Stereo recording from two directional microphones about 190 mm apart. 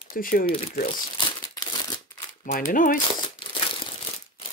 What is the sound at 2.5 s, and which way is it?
Speech, 45° left (ahead or behind).